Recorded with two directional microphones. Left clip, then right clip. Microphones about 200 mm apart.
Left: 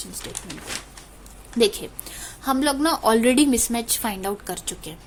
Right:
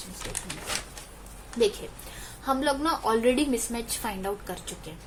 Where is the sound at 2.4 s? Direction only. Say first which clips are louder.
Left 4 dB; 50° left (ahead or behind).